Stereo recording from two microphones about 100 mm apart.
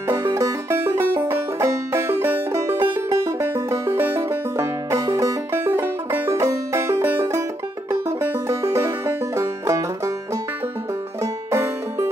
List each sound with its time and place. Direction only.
0.1 s banjo: 30° right (ahead or behind)
7.9 s music: 25° right (ahead or behind)
11.5 s music: 25° right (ahead or behind)